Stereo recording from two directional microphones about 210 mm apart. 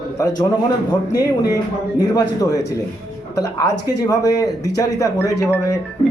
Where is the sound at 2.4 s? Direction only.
15° left (ahead or behind).